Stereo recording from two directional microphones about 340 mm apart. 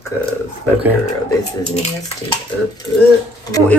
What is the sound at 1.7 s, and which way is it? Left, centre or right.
Speech, centre.